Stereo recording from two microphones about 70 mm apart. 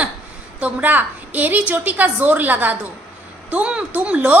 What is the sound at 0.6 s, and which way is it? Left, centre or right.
A woman's voice, centre.